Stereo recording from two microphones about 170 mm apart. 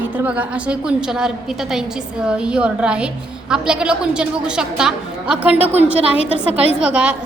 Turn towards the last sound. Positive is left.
turn(degrees=-5)  # may be behind; listen again after turning